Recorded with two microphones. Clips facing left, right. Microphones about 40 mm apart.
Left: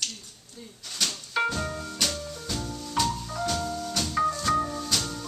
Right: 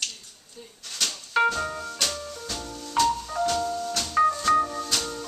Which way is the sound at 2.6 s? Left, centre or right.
Centre.